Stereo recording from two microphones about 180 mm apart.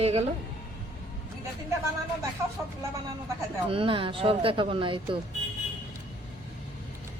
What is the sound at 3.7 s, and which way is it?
Speech, 30° right (ahead or behind).